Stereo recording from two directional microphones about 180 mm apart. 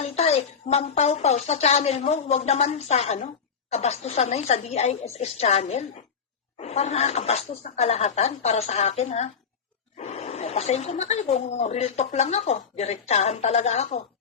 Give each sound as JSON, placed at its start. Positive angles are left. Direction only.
{"t": 0.0, "sound": "speech", "side_deg": 35}